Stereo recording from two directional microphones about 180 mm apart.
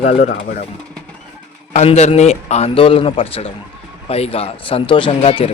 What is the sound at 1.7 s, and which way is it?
A man's voice, 40° left (ahead or behind).